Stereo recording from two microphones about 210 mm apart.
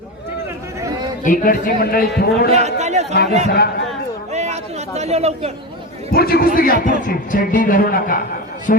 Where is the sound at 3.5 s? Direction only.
50° left (ahead or behind).